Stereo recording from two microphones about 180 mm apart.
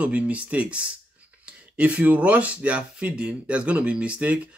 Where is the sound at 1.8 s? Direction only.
10° right (ahead or behind).